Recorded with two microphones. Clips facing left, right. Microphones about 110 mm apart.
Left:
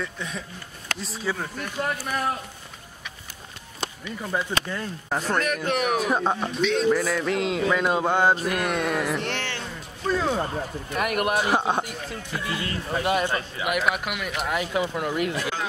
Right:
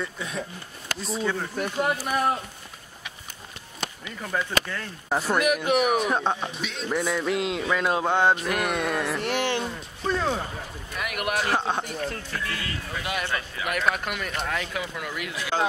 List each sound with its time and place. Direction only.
0.0 s music: centre (ahead or behind)
1.8 s speech: 10° right (ahead or behind)
4.4 s speech: 20° left (ahead or behind)
5.1 s music: 10° right (ahead or behind)
9.4 s a sound: 15° right (ahead or behind)
10.0 s music: centre (ahead or behind)
10.4 s speech: 50° left (ahead or behind)
11.3 s a man's voice: 15° left (ahead or behind)
12.9 s speech: 40° left (ahead or behind)
13.2 s a man's voice: 15° left (ahead or behind)
13.7 s music: 5° left (ahead or behind)
14.5 s a man's voice: 15° left (ahead or behind)
14.8 s speech: 30° left (ahead or behind)